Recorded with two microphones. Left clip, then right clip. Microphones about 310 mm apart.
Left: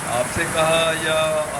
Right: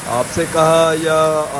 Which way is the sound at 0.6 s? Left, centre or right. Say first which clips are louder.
Right 6 dB; left.